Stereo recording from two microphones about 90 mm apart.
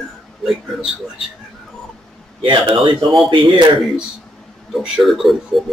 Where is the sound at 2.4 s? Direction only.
65° right (ahead or behind).